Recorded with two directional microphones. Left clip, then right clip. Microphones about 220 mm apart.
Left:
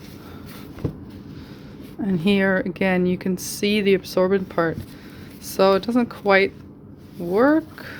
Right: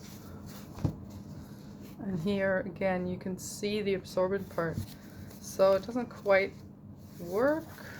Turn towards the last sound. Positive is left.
turn(degrees=45)  # may be behind; listen again after turning